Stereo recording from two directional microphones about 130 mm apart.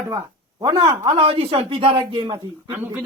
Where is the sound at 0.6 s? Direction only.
35° right (ahead or behind).